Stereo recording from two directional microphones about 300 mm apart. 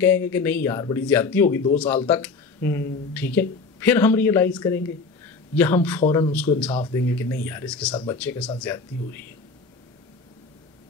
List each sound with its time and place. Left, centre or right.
0.0 s speech: centre
7.9 s speech: centre
8.2 s speech: centre